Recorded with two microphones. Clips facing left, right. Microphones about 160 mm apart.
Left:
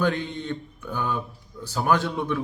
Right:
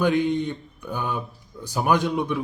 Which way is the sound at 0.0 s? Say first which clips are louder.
Right 5 dB; 15° right (ahead or behind).